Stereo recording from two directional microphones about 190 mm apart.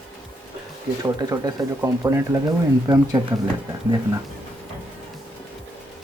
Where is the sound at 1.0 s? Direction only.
20° right (ahead or behind).